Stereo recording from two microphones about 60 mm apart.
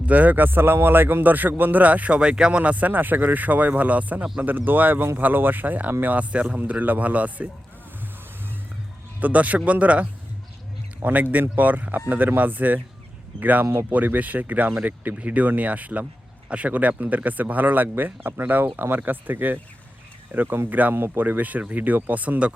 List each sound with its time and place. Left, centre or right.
0.0 s a man's voice: right
9.2 s a man's voice: right